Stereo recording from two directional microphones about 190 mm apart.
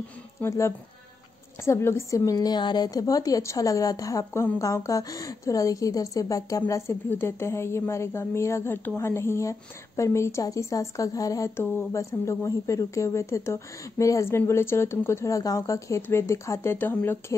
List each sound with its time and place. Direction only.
0.4 s a woman's voice: 15° left (ahead or behind)